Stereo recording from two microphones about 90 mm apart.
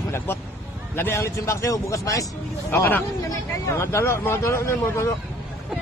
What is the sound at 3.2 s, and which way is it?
Speech, 40° left (ahead or behind).